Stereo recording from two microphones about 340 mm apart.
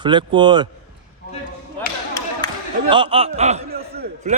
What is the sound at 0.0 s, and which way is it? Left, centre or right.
Speech, centre.